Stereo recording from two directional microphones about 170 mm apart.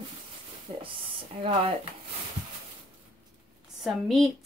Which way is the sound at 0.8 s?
30° right (ahead or behind).